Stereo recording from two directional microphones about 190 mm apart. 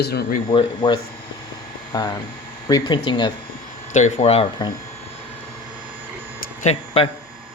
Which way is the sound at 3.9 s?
40° left (ahead or behind).